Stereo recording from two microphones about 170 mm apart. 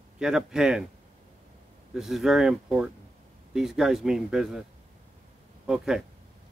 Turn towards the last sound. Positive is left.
turn(degrees=-5)  # may be behind; listen again after turning